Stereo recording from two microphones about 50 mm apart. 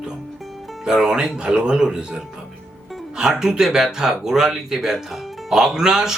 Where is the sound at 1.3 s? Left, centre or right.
Centre.